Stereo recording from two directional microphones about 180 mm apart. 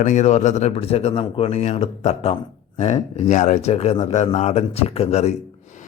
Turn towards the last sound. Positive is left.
turn(degrees=35)  # may be behind; listen again after turning